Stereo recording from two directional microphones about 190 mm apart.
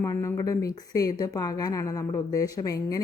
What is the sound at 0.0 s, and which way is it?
A woman's voice, 15° left (ahead or behind).